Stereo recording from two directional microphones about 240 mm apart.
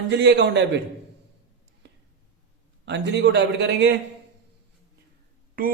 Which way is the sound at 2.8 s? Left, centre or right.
Right.